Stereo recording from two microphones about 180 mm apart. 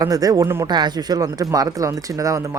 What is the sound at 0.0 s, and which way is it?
Speech, 20° right (ahead or behind).